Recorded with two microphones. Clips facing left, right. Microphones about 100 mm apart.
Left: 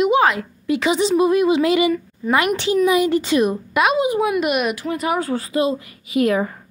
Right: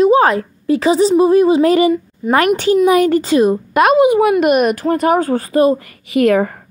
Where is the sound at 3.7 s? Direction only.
45° right (ahead or behind).